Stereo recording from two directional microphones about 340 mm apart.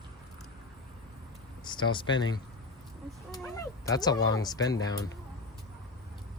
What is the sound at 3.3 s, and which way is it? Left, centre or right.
Cat, centre.